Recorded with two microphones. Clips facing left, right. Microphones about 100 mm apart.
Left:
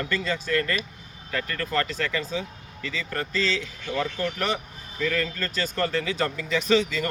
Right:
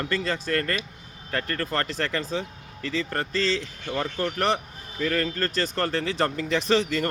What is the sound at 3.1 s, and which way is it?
Speech, 35° right (ahead or behind).